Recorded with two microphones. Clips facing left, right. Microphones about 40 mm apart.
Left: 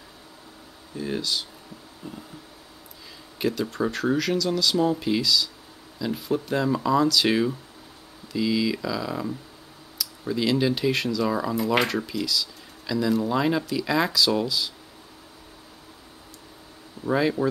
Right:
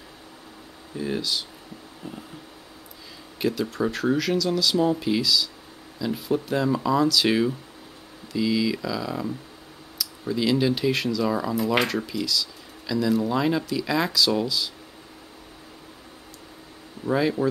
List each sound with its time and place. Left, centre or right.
0.9 s speech: centre
2.0 s vehicle: centre
3.3 s speech: centre
17.0 s speech: centre